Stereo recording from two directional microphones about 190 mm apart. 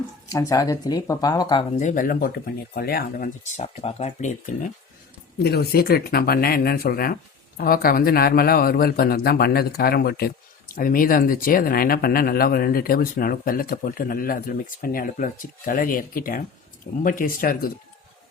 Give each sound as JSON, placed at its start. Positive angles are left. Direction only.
{"t": 0.3, "sound": "speech", "side_deg": 20}
{"t": 1.8, "sound": "a man's voice", "side_deg": 40}
{"t": 5.4, "sound": "a man's voice", "side_deg": 55}